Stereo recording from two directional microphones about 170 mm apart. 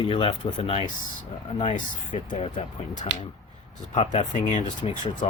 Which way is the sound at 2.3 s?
40° left (ahead or behind).